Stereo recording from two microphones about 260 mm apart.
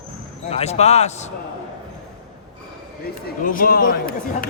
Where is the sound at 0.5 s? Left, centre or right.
Left.